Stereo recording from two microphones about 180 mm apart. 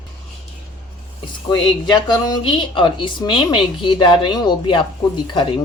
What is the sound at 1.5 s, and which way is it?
A woman's voice, 25° left (ahead or behind).